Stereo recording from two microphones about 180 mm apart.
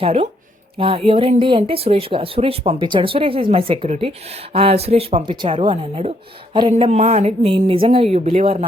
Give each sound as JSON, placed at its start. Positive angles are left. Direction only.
{"t": 0.0, "sound": "speech", "side_deg": -30}